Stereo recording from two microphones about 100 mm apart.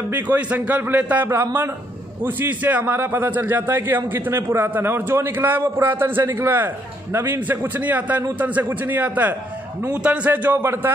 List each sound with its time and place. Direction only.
0.1 s a man's voice: 15° right (ahead or behind)